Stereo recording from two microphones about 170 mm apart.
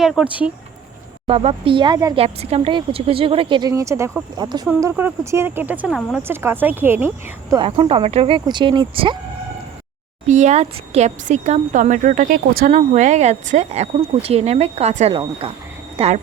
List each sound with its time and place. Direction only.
0.0 s speech: 5° right (ahead or behind)
1.3 s speech: 35° right (ahead or behind)
2.1 s speech: 35° right (ahead or behind)
3.7 s speech: 20° right (ahead or behind)
4.8 s speech: 15° right (ahead or behind)
7.5 s speech: 30° right (ahead or behind)
10.2 s speech: 45° right (ahead or behind)